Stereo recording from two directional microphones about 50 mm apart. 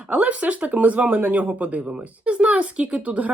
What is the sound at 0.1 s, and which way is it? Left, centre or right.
Speech, right.